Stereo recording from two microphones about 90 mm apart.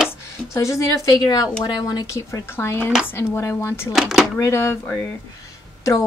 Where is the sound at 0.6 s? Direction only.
35° left (ahead or behind).